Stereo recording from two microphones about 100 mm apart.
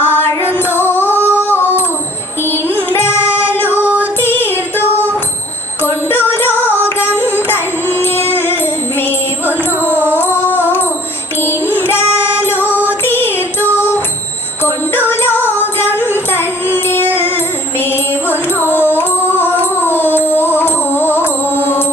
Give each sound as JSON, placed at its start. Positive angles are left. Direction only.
{"t": 0.0, "sound": "music", "side_deg": 20}
{"t": 0.8, "sound": "singing", "side_deg": 20}
{"t": 2.4, "sound": "music", "side_deg": 20}
{"t": 3.8, "sound": "music", "side_deg": -15}
{"t": 4.2, "sound": "music", "side_deg": 20}
{"t": 5.8, "sound": "a sound", "side_deg": 20}
{"t": 6.5, "sound": "music", "side_deg": -20}
{"t": 6.7, "sound": "carnatic music", "side_deg": 20}
{"t": 7.9, "sound": "music", "side_deg": 25}
{"t": 9.9, "sound": "music", "side_deg": -20}
{"t": 10.3, "sound": "music", "side_deg": 20}
{"t": 11.8, "sound": "child singing", "side_deg": 20}
{"t": 12.5, "sound": "music", "side_deg": -15}
{"t": 13.1, "sound": "music", "side_deg": 20}